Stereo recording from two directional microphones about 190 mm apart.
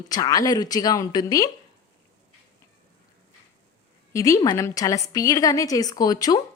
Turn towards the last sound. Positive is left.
turn(degrees=20)  # may be behind; listen again after turning